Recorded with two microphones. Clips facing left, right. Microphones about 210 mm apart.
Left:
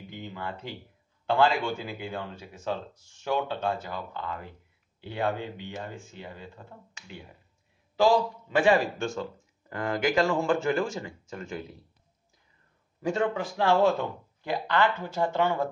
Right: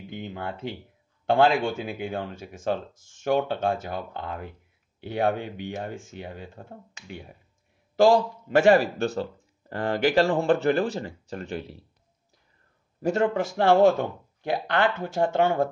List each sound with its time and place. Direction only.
0.1 s a sound: 50° right (ahead or behind)
1.3 s speech: 50° right (ahead or behind)
8.0 s a man's voice: 50° right (ahead or behind)
13.5 s speech: 45° right (ahead or behind)